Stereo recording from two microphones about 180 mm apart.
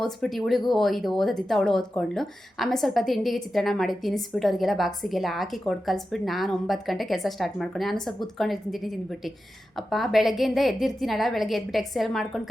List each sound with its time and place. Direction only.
0.0 s speech: centre (ahead or behind)